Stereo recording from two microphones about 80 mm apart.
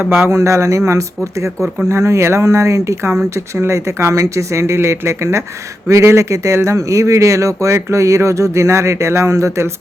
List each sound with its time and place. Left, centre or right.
0.2 s speech: right
1.9 s speech: right